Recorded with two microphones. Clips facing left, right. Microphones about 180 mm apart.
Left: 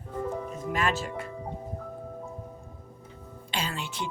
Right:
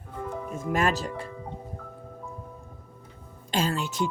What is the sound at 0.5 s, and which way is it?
Speech, 45° right (ahead or behind).